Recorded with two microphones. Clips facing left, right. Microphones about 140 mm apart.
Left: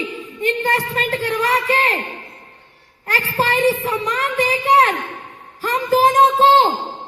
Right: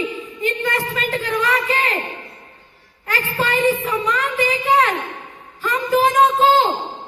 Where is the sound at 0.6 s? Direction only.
35° left (ahead or behind).